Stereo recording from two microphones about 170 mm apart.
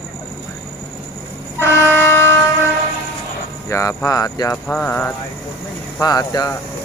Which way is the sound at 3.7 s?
20° left (ahead or behind).